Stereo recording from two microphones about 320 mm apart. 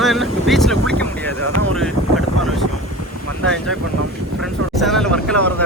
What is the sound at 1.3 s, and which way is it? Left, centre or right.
Speech, right.